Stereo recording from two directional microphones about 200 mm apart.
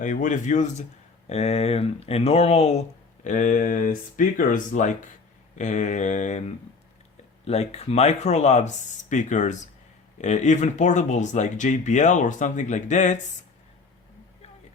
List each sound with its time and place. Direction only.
0.0 s speech: 40° left (ahead or behind)
7.4 s speech: 30° left (ahead or behind)